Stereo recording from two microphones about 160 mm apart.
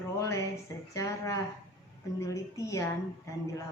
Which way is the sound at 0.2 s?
20° left (ahead or behind).